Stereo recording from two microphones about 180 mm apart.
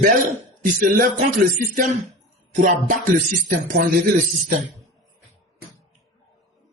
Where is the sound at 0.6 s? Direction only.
50° right (ahead or behind).